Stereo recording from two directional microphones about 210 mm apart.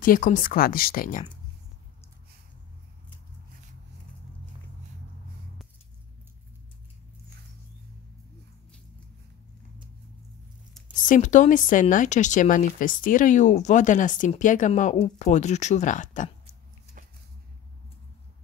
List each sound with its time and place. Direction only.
0.0 s speech: 40° left (ahead or behind)
11.0 s speech: 35° left (ahead or behind)